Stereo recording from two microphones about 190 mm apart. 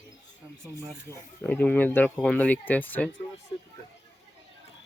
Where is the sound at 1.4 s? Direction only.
10° left (ahead or behind).